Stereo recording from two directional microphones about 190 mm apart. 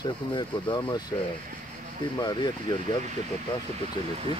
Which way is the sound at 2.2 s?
20° left (ahead or behind).